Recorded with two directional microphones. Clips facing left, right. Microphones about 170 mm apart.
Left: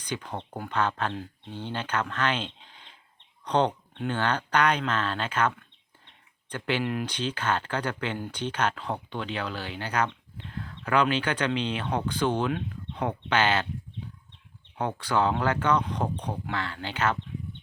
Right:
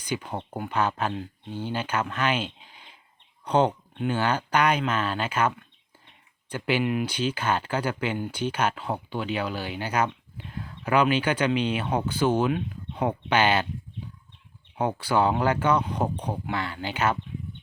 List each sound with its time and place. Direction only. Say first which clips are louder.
0.0 s speech: right 3 dB; 10° right (ahead or behind)
14.8 s speech: right 3 dB; 10° right (ahead or behind)